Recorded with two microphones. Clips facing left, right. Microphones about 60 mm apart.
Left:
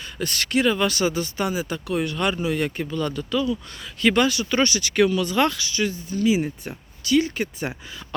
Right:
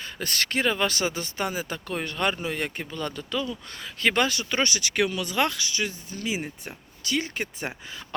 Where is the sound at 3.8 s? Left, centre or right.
Right.